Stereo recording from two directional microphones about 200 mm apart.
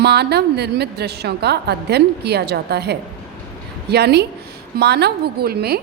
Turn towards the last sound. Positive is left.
turn(degrees=-50)  # may be behind; listen again after turning